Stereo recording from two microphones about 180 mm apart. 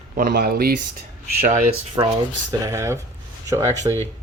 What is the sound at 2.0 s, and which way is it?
Speech, 20° right (ahead or behind).